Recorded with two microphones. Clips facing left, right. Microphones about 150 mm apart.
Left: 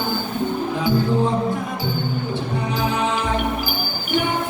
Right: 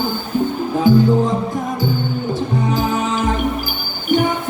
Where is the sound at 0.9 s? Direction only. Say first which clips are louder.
Right 8 dB; 45° right (ahead or behind).